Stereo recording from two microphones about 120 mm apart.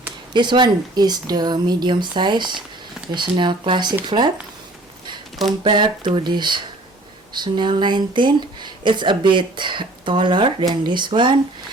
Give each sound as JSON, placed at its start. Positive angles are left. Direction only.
{"t": 0.3, "sound": "speech", "side_deg": -40}
{"t": 5.6, "sound": "speech", "side_deg": -40}